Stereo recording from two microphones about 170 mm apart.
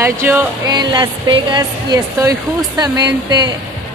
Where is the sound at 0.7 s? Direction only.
25° right (ahead or behind).